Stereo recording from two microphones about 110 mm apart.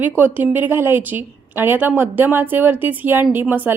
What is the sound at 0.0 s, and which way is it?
A woman's voice, 15° right (ahead or behind).